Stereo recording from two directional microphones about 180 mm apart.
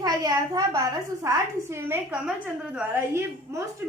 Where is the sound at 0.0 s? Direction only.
20° right (ahead or behind).